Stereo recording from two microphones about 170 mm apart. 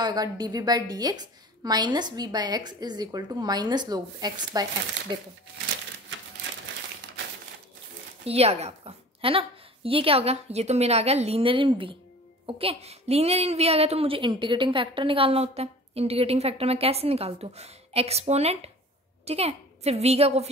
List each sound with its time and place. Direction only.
0.0 s a woman's voice: 25° right (ahead or behind)
8.3 s a woman's voice: 35° right (ahead or behind)